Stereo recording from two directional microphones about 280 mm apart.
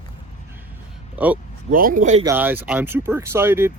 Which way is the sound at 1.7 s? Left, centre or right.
Right.